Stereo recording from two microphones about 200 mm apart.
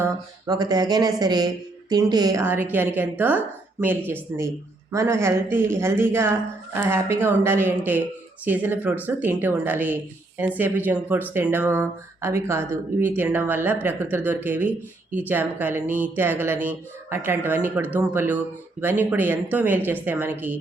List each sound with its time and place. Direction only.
0.0 s speech: 20° right (ahead or behind)